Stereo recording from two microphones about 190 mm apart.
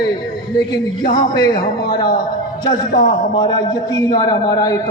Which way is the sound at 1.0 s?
45° left (ahead or behind).